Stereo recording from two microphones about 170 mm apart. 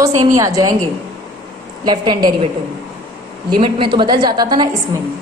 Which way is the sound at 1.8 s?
25° right (ahead or behind).